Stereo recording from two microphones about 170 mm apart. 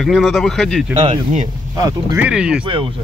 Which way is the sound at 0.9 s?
40° right (ahead or behind).